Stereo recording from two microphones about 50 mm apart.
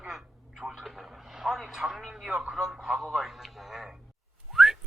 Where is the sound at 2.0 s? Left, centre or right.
Centre.